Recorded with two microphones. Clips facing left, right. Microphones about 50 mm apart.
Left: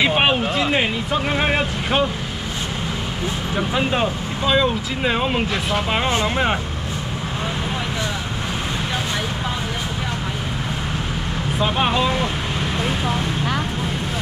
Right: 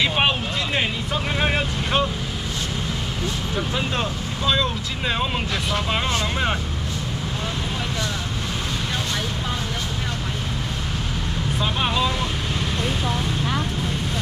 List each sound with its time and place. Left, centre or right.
0.0 s vehicle: centre
3.5 s speech: centre
11.5 s speech: centre